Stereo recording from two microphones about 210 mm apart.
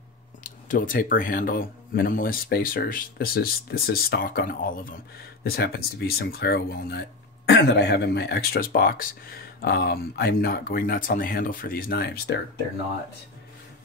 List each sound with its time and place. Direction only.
0.4 s speech: 40° left (ahead or behind)